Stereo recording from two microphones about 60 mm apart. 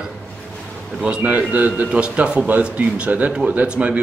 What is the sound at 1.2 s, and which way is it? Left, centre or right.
A man's voice, right.